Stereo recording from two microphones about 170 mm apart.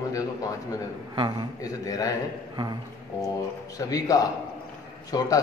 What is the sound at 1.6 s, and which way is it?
Speech, 20° left (ahead or behind).